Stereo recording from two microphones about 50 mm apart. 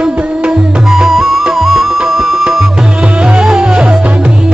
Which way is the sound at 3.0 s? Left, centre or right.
Right.